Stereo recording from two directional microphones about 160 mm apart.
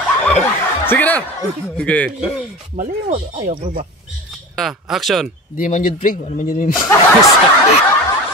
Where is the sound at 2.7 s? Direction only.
45° right (ahead or behind).